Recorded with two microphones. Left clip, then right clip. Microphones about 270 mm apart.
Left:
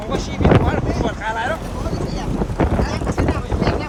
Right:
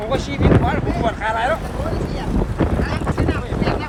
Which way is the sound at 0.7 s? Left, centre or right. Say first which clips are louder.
Right 1 dB; right.